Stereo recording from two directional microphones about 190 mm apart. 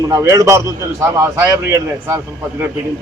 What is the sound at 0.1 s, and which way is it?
A man's voice, 15° right (ahead or behind).